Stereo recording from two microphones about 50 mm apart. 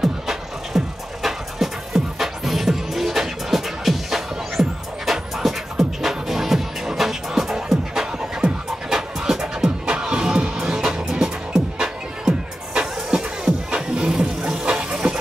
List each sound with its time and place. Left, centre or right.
0.0 s music: centre
13.7 s vehicle: centre
14.8 s steam: centre